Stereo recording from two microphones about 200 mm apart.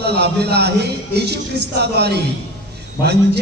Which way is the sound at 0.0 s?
55° right (ahead or behind).